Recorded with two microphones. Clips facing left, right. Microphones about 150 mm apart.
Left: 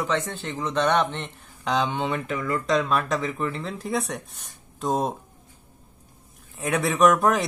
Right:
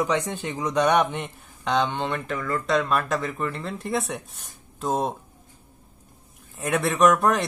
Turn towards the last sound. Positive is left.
turn(degrees=0)  # may be behind; listen again after turning